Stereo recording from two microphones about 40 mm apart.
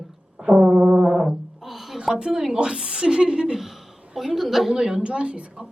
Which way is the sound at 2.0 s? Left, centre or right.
Right.